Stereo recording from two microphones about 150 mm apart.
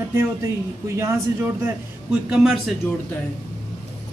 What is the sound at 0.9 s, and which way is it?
Speech, 15° right (ahead or behind).